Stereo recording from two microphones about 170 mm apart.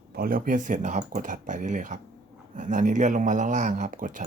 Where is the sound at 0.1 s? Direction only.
55° right (ahead or behind).